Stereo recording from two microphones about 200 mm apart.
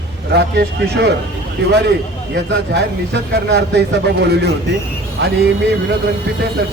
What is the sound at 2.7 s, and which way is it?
Speech, 55° right (ahead or behind).